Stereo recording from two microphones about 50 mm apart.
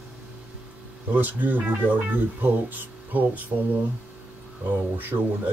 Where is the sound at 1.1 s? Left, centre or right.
Right.